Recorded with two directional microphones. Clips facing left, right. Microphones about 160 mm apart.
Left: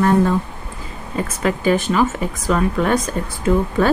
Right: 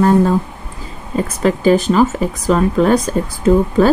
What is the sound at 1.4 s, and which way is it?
Speech, 35° right (ahead or behind).